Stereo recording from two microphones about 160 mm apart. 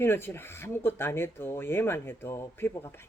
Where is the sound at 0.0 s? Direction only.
15° left (ahead or behind).